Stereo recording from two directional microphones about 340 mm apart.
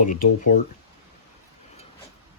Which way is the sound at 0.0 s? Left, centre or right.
Left.